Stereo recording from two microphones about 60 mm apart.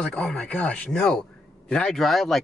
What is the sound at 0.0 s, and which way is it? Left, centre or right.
Speech, centre.